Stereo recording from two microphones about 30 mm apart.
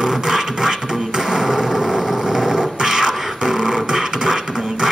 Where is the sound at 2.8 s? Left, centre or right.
Centre.